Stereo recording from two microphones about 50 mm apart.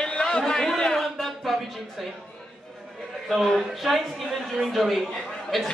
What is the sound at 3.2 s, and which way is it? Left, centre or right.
A man's voice, centre.